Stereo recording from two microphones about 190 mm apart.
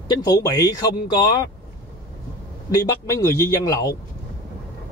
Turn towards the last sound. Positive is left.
turn(degrees=20)  # may be behind; listen again after turning